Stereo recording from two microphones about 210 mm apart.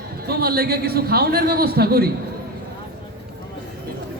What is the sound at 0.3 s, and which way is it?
A man's voice, 50° right (ahead or behind).